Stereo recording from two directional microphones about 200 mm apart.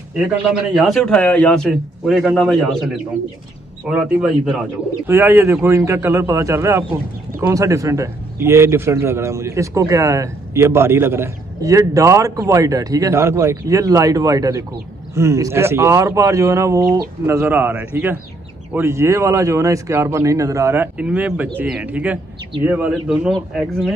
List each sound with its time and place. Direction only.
0.7 s a man's voice: centre (ahead or behind)
3.8 s a man's voice: 5° right (ahead or behind)